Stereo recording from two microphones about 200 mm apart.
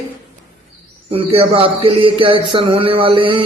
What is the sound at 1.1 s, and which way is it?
Speech, 30° right (ahead or behind).